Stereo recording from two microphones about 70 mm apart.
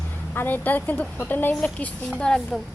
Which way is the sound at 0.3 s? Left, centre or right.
Left.